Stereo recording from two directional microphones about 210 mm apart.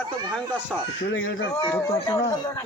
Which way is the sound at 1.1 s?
65° left (ahead or behind).